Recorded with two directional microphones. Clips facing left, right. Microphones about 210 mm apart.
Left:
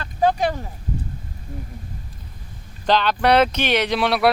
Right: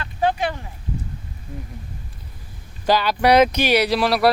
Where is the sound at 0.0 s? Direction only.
40° left (ahead or behind).